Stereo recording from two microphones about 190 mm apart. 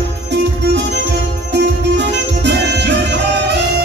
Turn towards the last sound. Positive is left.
turn(degrees=-65)  # may be behind; listen again after turning